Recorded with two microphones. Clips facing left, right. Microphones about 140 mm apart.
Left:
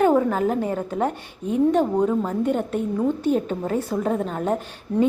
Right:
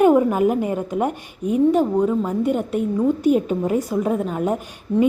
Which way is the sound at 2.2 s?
10° right (ahead or behind).